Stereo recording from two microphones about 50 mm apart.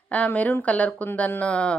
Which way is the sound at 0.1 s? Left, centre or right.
Left.